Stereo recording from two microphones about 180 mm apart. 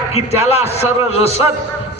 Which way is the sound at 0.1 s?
35° left (ahead or behind).